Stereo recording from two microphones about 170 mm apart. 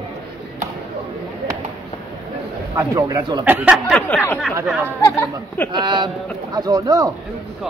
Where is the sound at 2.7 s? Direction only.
20° right (ahead or behind).